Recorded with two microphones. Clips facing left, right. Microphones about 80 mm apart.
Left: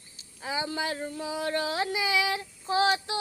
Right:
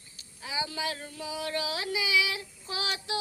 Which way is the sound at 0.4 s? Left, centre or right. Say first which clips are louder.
Left 3 dB; left.